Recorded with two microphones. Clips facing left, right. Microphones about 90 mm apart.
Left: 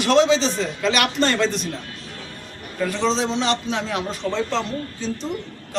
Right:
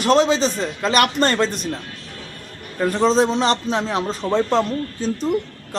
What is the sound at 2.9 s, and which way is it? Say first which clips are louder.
A man's voice: right 6 dB; 45° right (ahead or behind).